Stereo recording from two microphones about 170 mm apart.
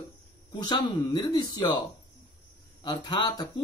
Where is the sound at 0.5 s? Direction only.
25° left (ahead or behind).